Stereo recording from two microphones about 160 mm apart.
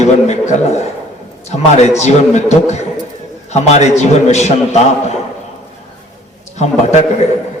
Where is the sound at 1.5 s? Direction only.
45° left (ahead or behind).